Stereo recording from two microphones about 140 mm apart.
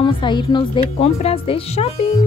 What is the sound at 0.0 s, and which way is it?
Speech, 35° left (ahead or behind).